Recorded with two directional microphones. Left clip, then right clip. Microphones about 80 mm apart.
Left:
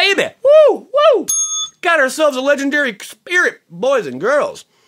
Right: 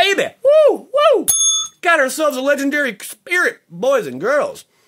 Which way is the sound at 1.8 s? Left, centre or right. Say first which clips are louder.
Left 2 dB; left.